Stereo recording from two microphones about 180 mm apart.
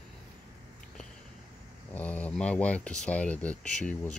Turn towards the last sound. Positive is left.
turn(degrees=5)  # may be behind; listen again after turning